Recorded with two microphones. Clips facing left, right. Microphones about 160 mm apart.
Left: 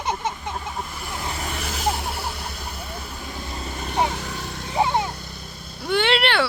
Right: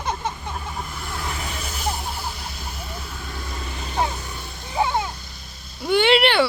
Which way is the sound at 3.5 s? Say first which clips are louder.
Left 2 dB; 30° left (ahead or behind).